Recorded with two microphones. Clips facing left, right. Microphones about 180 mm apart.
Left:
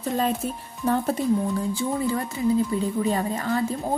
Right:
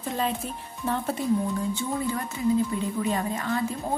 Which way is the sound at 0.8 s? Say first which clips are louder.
Left 5 dB; 40° left (ahead or behind).